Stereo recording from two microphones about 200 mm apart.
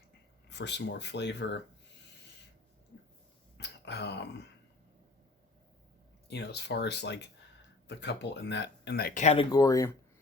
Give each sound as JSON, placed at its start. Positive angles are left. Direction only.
{"t": 0.5, "sound": "speech", "side_deg": 60}
{"t": 3.6, "sound": "speech", "side_deg": 60}
{"t": 6.2, "sound": "speech", "side_deg": 55}
{"t": 9.2, "sound": "speech", "side_deg": 30}